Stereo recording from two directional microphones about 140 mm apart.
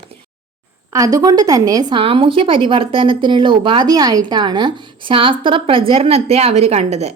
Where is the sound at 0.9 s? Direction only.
25° right (ahead or behind).